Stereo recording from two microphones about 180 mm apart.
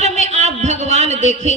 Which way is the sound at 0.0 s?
40° right (ahead or behind).